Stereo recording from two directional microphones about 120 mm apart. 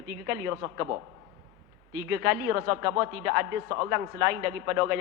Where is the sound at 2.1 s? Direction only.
20° right (ahead or behind).